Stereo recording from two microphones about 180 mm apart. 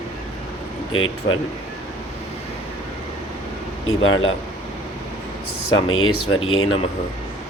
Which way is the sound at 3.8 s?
90° left.